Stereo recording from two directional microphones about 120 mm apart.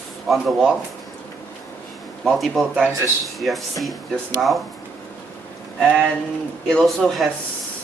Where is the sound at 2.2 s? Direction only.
Centre (ahead or behind).